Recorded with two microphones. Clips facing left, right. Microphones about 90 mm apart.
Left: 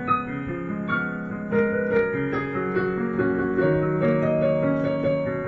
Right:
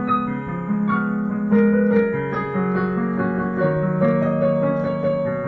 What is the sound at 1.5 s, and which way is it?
Music, 5° right (ahead or behind).